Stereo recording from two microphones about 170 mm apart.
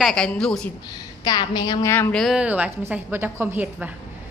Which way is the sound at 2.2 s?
5° right (ahead or behind).